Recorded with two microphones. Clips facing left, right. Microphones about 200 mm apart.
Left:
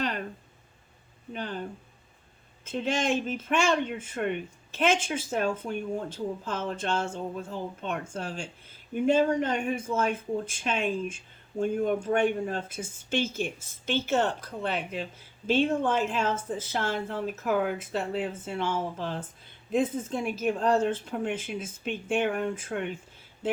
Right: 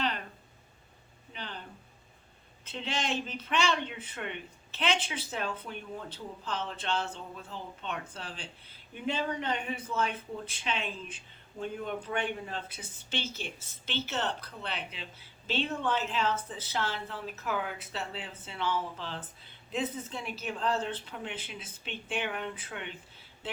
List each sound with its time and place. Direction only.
0.0 s a sound: 45° left (ahead or behind)
1.3 s speech: 45° left (ahead or behind)
2.6 s speech: 45° left (ahead or behind)